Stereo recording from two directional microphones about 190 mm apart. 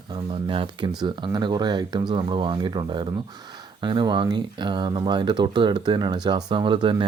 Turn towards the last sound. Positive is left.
turn(degrees=-25)  # may be behind; listen again after turning